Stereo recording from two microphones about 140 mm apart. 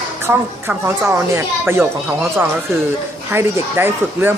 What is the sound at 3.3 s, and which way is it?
A child's voice, 15° right (ahead or behind).